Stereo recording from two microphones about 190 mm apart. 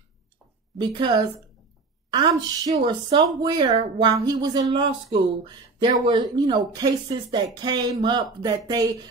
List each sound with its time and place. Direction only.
0.7 s speech: 25° right (ahead or behind)